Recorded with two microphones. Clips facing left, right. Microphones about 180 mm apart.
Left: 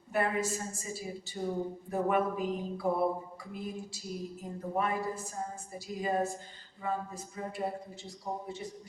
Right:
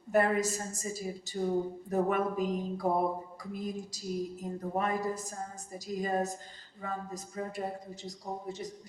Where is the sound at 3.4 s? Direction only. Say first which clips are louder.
Right 2 dB; 40° right (ahead or behind).